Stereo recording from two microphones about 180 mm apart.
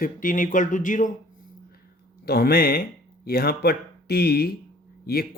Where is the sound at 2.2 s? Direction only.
60° left (ahead or behind).